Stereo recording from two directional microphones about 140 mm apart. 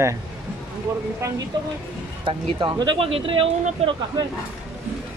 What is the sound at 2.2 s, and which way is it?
Speech, 30° right (ahead or behind).